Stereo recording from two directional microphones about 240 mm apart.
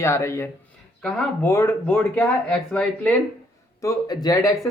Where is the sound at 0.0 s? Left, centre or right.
Centre.